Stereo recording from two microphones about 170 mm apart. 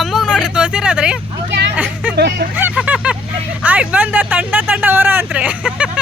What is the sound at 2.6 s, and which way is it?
Vehicle, 10° right (ahead or behind).